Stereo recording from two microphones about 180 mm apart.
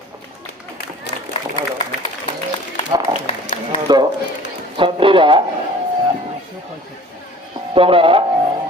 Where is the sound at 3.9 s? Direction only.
25° right (ahead or behind).